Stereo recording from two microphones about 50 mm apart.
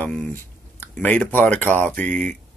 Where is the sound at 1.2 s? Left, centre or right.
Left.